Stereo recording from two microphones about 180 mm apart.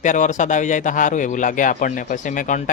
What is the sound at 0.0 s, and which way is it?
Speech, 45° left (ahead or behind).